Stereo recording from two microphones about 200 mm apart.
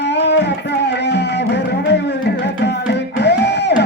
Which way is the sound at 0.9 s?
60° left (ahead or behind).